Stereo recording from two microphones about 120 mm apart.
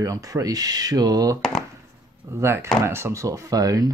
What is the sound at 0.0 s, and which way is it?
Speech, 30° right (ahead or behind).